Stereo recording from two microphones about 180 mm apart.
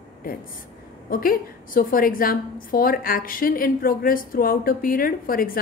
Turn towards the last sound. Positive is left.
turn(degrees=55)  # may be behind; listen again after turning